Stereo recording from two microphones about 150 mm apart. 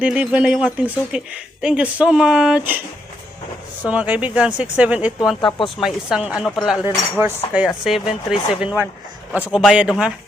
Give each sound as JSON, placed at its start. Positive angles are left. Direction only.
{"t": 0.0, "sound": "speech", "side_deg": -10}
{"t": 3.8, "sound": "speech", "side_deg": -10}
{"t": 5.4, "sound": "speech", "side_deg": 30}
{"t": 5.8, "sound": "speech", "side_deg": -5}